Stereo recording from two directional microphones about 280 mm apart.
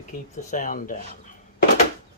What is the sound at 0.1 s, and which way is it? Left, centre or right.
Speech, left.